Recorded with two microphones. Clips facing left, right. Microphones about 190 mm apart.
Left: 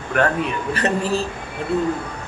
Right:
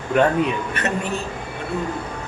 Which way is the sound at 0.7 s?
35° left (ahead or behind).